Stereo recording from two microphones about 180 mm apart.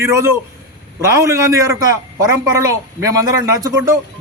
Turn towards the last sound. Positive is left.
turn(degrees=-20)  # may be behind; listen again after turning